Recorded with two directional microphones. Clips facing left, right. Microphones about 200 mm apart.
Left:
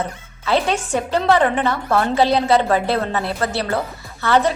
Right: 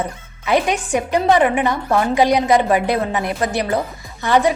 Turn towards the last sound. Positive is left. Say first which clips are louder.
# right 1 dB
turn(degrees=-15)  # may be behind; listen again after turning